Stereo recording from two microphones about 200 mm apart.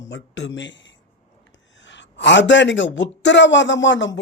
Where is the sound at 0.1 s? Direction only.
60° left (ahead or behind).